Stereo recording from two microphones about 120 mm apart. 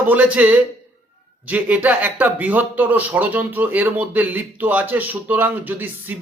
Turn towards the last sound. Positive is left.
turn(degrees=-15)  # may be behind; listen again after turning